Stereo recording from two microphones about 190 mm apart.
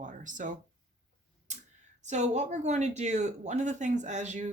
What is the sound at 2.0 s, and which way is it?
Speech, 35° right (ahead or behind).